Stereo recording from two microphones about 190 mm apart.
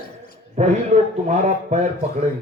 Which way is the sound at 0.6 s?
35° right (ahead or behind).